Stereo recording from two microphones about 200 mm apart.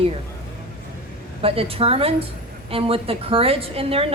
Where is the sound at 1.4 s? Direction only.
30° right (ahead or behind).